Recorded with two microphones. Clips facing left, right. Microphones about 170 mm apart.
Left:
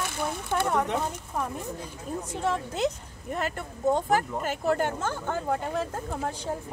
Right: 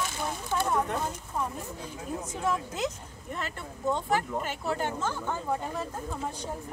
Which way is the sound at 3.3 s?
45° left (ahead or behind).